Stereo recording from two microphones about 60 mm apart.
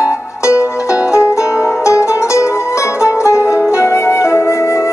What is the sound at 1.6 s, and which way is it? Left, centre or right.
Music, left.